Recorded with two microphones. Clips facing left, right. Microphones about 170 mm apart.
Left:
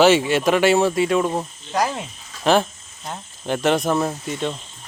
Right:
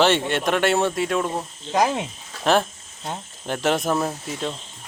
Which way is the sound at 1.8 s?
20° right (ahead or behind).